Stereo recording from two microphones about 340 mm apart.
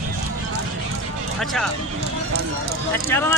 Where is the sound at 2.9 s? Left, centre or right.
Centre.